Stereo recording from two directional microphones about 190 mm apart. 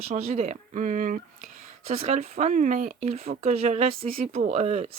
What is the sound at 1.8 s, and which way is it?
Speech, 35° right (ahead or behind).